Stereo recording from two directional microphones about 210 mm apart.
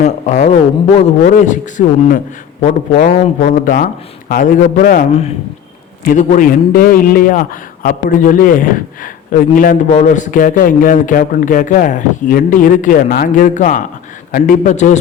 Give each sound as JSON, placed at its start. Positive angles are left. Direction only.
{"t": 0.0, "sound": "a man's voice", "side_deg": 35}
{"t": 6.1, "sound": "a man's voice", "side_deg": 40}